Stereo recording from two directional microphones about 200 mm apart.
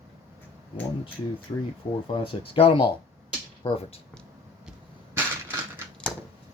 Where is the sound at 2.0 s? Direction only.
25° left (ahead or behind).